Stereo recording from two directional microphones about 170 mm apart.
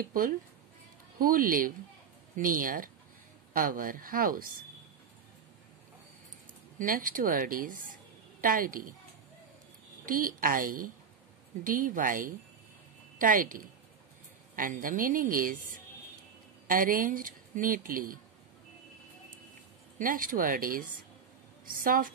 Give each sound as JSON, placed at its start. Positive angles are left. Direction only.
{"t": 0.0, "sound": "speech", "side_deg": -55}
{"t": 6.8, "sound": "a woman's voice", "side_deg": -55}
{"t": 10.0, "sound": "a woman's voice", "side_deg": -55}
{"t": 20.0, "sound": "speech", "side_deg": -55}